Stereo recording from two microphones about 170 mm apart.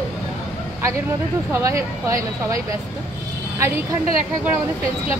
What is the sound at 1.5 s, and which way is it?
Speech, 15° right (ahead or behind).